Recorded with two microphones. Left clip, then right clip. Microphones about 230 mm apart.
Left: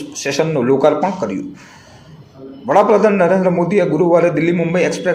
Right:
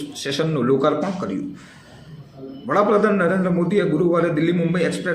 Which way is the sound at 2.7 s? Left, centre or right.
Centre.